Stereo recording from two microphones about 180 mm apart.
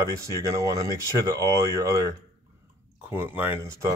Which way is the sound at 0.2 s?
20° right (ahead or behind).